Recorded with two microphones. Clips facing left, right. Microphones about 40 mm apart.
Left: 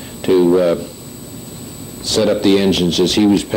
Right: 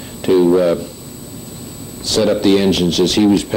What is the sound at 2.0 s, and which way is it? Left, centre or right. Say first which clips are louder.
A man's voice: even; left.